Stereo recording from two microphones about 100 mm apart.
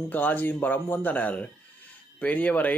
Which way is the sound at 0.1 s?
15° left (ahead or behind).